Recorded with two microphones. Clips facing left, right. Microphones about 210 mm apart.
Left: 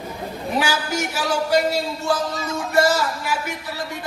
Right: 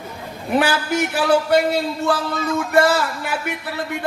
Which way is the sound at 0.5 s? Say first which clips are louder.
Right 5 dB; 55° right (ahead or behind).